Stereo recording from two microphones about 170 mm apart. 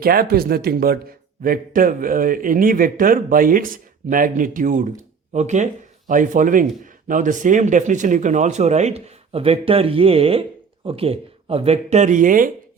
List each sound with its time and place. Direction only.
0.0 s a man's voice: 60° right (ahead or behind)